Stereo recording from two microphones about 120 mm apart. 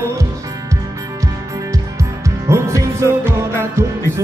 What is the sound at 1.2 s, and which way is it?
Music, 25° right (ahead or behind).